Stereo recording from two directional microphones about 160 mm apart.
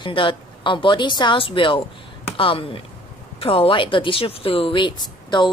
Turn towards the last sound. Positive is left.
turn(degrees=30)  # may be behind; listen again after turning